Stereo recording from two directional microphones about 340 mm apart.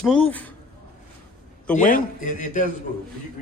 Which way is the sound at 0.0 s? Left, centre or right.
Centre.